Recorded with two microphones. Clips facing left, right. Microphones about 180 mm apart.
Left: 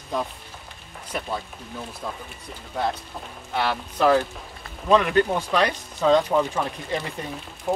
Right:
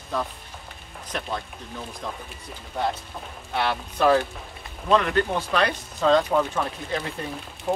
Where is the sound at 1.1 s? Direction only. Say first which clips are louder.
Left 1 dB; 5° left (ahead or behind).